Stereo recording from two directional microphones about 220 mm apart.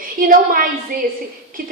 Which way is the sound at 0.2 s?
40° right (ahead or behind).